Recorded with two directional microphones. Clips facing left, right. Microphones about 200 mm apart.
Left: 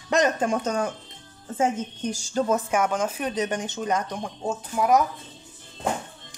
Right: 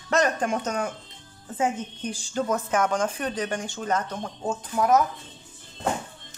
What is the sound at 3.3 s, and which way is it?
Speech, 20° left (ahead or behind).